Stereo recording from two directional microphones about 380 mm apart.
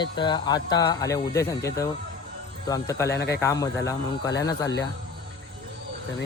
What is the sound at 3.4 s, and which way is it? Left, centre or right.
Speech, centre.